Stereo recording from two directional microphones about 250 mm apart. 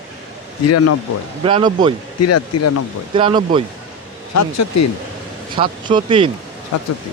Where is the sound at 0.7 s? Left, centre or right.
Left.